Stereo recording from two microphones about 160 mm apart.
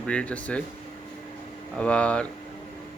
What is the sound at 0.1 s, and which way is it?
Speech, 5° left (ahead or behind).